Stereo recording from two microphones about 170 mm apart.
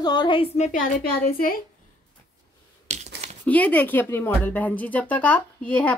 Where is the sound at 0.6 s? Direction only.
50° left (ahead or behind).